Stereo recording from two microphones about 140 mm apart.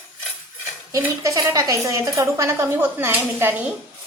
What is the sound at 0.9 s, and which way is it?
Speech, 20° right (ahead or behind).